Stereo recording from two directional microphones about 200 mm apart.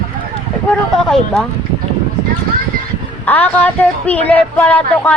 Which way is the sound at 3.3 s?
10° left (ahead or behind).